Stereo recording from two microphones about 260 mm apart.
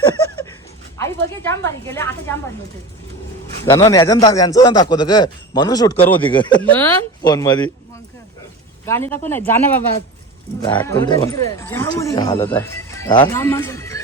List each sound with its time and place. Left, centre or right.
0.9 s speech: centre
3.7 s speech: centre
6.2 s speech: centre
6.6 s speech: centre
8.9 s speech: centre
10.6 s speech: centre